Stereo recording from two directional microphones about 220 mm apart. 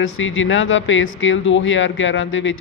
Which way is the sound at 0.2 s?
60° left (ahead or behind).